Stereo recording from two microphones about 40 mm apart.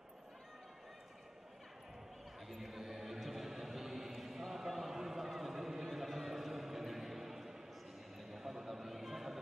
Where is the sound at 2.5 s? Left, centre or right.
Centre.